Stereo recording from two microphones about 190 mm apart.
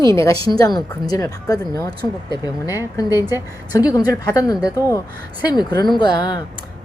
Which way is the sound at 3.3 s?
15° left (ahead or behind).